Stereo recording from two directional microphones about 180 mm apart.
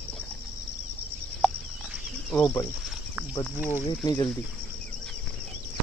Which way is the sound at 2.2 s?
5° left (ahead or behind).